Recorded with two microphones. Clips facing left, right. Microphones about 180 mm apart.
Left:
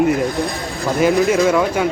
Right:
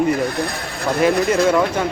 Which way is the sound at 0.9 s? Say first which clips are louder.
Left 2 dB; centre (ahead or behind).